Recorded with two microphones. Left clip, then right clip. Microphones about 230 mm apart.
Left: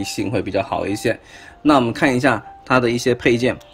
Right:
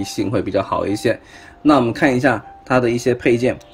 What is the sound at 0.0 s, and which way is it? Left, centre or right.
Speech, centre.